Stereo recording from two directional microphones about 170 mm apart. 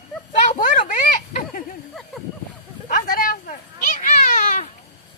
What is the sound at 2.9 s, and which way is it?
Cat, 55° left (ahead or behind).